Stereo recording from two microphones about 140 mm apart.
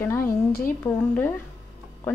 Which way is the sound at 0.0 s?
20° left (ahead or behind).